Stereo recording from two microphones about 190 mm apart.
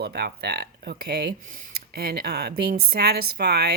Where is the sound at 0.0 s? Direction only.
60° right (ahead or behind).